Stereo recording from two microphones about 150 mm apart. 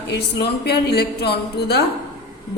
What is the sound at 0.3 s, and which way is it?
A woman's voice, 90° left.